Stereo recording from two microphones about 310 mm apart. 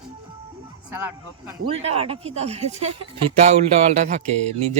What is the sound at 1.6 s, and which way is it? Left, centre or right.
Speech, centre.